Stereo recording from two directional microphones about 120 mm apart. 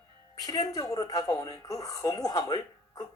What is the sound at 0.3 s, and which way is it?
Speech, 35° left (ahead or behind).